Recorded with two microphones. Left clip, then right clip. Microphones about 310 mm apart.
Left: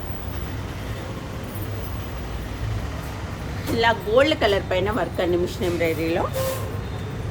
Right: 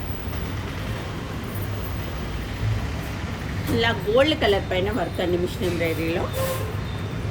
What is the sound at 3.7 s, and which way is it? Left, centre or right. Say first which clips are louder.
Speech: left 2 dB; centre.